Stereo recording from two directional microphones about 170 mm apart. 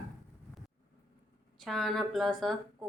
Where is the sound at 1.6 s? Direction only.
Centre (ahead or behind).